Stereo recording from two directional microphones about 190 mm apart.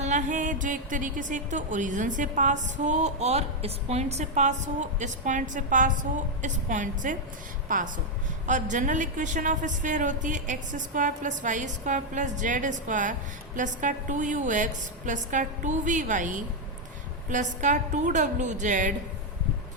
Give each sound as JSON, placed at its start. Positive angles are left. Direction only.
{"t": 0.0, "sound": "a woman's voice", "side_deg": -40}